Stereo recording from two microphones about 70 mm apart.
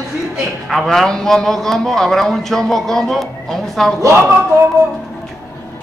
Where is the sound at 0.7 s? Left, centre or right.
Centre.